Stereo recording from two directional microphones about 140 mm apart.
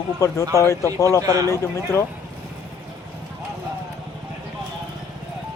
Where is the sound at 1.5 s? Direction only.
20° left (ahead or behind).